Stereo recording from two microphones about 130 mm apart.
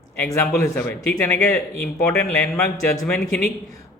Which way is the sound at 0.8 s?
10° left (ahead or behind).